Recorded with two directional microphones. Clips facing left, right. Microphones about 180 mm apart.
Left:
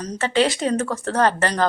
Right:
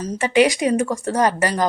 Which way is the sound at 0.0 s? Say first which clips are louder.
Right 3 dB; 10° right (ahead or behind).